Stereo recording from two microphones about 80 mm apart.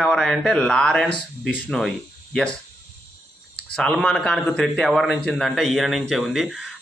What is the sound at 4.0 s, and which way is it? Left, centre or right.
Speech, centre.